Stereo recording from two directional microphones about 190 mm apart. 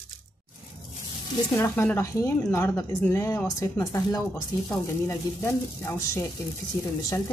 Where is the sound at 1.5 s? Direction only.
15° left (ahead or behind).